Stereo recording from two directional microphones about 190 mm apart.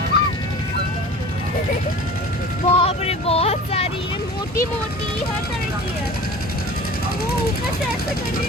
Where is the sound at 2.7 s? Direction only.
30° left (ahead or behind).